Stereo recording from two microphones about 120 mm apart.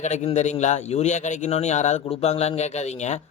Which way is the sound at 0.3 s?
80° left.